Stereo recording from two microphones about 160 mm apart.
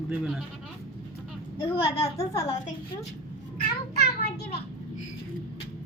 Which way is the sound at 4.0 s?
90° left.